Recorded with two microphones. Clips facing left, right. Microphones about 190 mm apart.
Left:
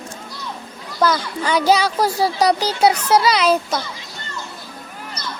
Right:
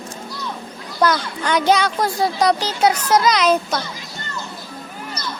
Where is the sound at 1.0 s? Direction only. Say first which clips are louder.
Even; 5° left (ahead or behind).